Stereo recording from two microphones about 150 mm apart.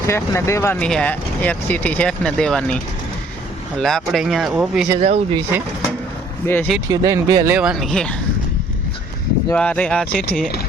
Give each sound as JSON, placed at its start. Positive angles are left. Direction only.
{"t": 0.1, "sound": "speech", "side_deg": 20}
{"t": 4.9, "sound": "speech", "side_deg": -40}
{"t": 6.4, "sound": "speech", "side_deg": 15}
{"t": 6.9, "sound": "speech", "side_deg": -25}
{"t": 7.5, "sound": "speech", "side_deg": -5}
{"t": 9.6, "sound": "speech", "side_deg": 10}